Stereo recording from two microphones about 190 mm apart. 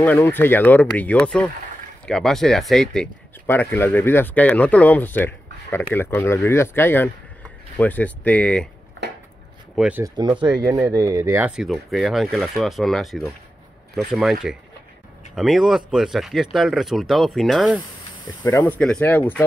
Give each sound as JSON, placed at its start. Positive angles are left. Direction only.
{"t": 0.0, "sound": "speech", "side_deg": 10}
{"t": 9.8, "sound": "speech", "side_deg": -5}
{"t": 10.0, "sound": "speech", "side_deg": -25}
{"t": 18.4, "sound": "speech", "side_deg": 15}
{"t": 18.8, "sound": "speech", "side_deg": 5}